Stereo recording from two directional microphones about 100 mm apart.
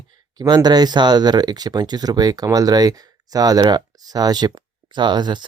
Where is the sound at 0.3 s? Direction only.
45° right (ahead or behind).